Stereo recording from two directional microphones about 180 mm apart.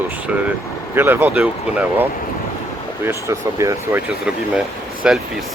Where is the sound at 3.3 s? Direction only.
15° right (ahead or behind).